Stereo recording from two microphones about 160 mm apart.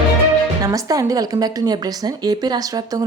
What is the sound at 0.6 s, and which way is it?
A woman's voice, 20° right (ahead or behind).